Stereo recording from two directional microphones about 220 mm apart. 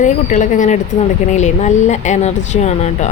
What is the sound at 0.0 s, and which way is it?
Speech, 35° left (ahead or behind).